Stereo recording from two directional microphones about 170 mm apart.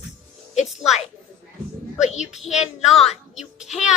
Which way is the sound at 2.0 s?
40° left (ahead or behind).